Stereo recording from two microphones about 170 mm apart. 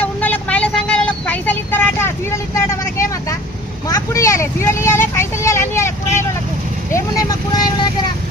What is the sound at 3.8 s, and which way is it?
Speech, 20° left (ahead or behind).